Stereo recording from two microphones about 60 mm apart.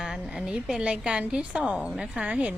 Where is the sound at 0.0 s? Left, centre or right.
Centre.